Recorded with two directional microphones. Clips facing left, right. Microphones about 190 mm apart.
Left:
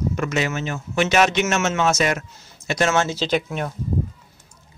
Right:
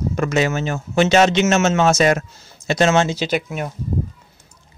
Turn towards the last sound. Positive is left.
turn(degrees=-5)  # may be behind; listen again after turning